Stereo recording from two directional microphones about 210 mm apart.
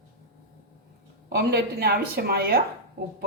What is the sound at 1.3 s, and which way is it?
A woman's voice, 50° right (ahead or behind).